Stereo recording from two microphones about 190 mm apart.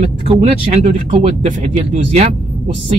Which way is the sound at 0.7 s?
35° right (ahead or behind).